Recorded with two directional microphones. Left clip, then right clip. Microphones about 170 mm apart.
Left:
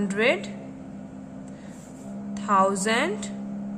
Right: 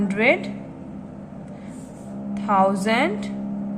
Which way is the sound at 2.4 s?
30° left (ahead or behind).